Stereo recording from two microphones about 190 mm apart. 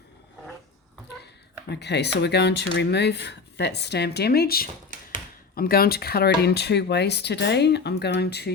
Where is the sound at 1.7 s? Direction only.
60° left (ahead or behind).